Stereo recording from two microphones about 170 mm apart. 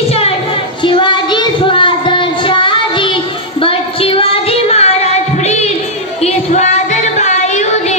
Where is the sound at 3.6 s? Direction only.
35° left (ahead or behind).